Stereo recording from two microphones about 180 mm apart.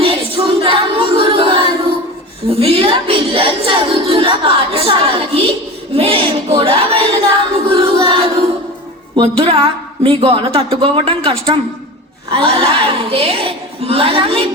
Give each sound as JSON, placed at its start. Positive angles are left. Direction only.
{"t": 0.0, "sound": "female singing", "side_deg": -30}
{"t": 2.5, "sound": "speech", "side_deg": -30}
{"t": 5.9, "sound": "a sound", "side_deg": -30}
{"t": 9.1, "sound": "speech", "side_deg": -30}